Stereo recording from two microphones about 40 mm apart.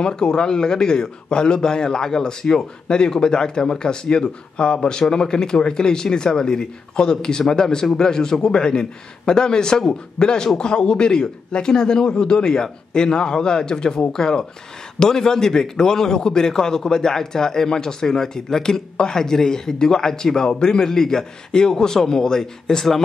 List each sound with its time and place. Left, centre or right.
0.0 s a man's voice: centre